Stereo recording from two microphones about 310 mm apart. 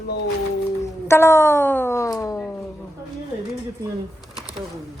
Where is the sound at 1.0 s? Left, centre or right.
Centre.